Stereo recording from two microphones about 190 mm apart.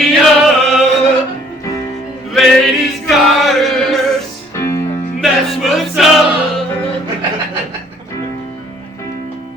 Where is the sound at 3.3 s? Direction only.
Centre (ahead or behind).